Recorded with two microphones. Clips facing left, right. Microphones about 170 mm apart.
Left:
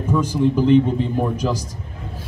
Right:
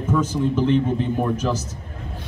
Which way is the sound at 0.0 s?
10° left (ahead or behind).